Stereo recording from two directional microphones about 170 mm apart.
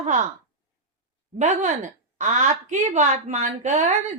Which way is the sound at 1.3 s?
45° right (ahead or behind).